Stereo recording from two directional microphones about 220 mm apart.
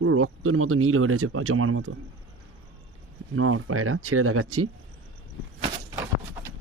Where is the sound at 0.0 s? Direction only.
75° right (ahead or behind).